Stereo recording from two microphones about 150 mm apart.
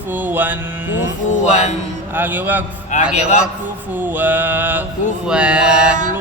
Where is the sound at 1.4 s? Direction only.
50° left (ahead or behind).